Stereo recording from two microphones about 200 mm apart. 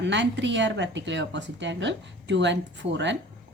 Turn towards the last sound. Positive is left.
turn(degrees=-65)  # may be behind; listen again after turning